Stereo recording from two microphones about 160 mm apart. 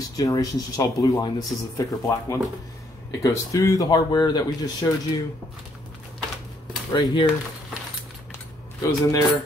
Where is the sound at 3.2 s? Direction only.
20° left (ahead or behind).